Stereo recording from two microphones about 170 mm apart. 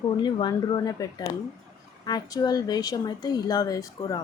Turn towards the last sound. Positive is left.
turn(degrees=20)  # may be behind; listen again after turning